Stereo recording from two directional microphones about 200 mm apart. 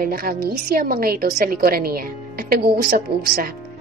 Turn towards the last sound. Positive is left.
turn(degrees=-55)  # may be behind; listen again after turning